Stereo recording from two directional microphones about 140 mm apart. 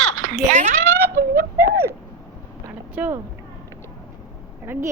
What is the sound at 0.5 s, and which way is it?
Speech, 65° right (ahead or behind).